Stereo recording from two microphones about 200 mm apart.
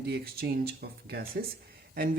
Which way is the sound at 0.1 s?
50° right (ahead or behind).